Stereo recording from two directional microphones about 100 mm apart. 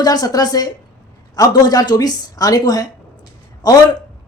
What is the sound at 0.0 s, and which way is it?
Speech, 40° left (ahead or behind).